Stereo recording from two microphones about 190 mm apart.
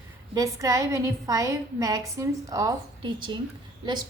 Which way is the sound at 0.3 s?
20° right (ahead or behind).